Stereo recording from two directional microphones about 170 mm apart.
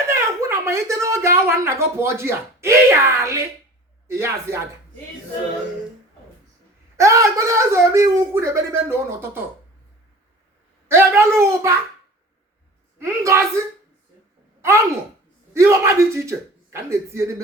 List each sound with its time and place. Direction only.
0.1 s a woman's voice: 15° right (ahead or behind)
6.9 s speech: 20° right (ahead or behind)
10.8 s speech: 15° right (ahead or behind)
13.0 s speech: 15° right (ahead or behind)
15.5 s speech: 15° right (ahead or behind)